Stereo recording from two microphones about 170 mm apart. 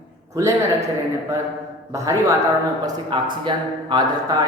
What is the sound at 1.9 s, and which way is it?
A man's voice, 15° right (ahead or behind).